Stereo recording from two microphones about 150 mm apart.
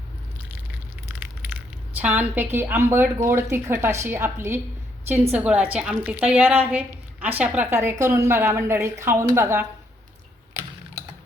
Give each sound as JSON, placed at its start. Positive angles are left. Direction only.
{"t": 1.2, "sound": "a woman's voice", "side_deg": -10}